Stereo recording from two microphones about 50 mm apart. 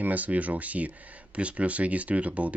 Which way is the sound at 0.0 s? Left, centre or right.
Right.